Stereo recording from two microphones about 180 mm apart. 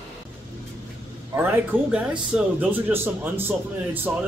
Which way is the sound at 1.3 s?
10° right (ahead or behind).